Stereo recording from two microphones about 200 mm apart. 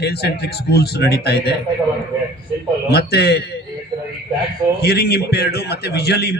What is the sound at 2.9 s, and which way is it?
Speech, 55° left (ahead or behind).